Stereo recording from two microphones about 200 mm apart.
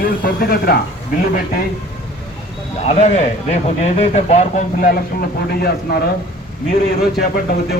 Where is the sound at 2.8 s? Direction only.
35° left (ahead or behind).